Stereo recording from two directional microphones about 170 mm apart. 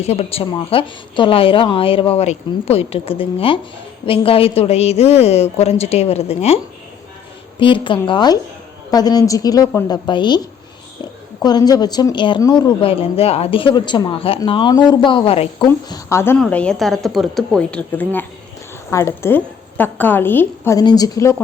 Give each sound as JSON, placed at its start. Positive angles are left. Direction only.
{"t": 0.0, "sound": "a woman's voice", "side_deg": 35}
{"t": 7.6, "sound": "speech", "side_deg": 30}
{"t": 11.4, "sound": "speech", "side_deg": 25}
{"t": 15.9, "sound": "a woman's voice", "side_deg": 15}